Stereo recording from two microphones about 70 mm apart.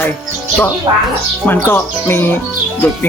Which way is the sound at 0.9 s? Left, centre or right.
Right.